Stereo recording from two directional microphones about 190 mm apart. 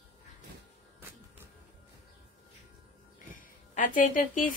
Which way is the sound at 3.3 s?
45° left (ahead or behind).